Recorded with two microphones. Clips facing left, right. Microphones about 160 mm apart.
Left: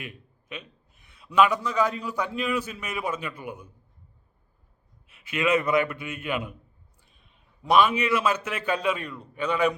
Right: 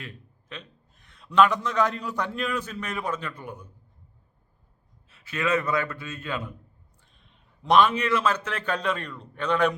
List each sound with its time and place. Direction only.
0.0 s a man's voice: 10° left (ahead or behind)
5.0 s a man's voice: 15° left (ahead or behind)